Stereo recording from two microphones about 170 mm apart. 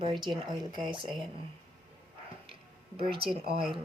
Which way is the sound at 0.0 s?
30° right (ahead or behind).